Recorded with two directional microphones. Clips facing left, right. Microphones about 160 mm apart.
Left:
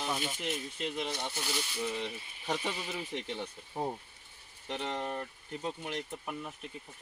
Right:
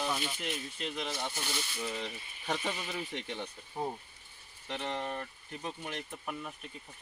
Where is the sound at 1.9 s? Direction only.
15° left (ahead or behind).